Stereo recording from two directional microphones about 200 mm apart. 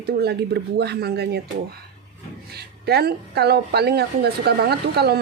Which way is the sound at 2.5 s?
55° right (ahead or behind).